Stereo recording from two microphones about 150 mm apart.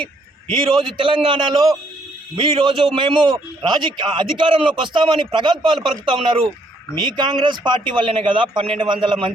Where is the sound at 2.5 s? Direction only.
35° right (ahead or behind).